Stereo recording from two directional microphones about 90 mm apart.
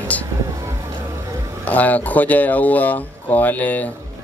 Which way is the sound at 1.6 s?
15° left (ahead or behind).